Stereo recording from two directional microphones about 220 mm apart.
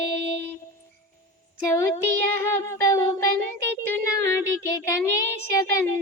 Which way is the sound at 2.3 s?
10° left (ahead or behind).